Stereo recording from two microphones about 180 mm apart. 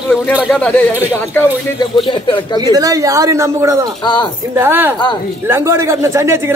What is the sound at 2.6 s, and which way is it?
A man's voice, 20° right (ahead or behind).